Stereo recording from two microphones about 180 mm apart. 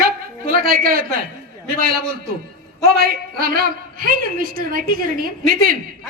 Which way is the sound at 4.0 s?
55° right (ahead or behind).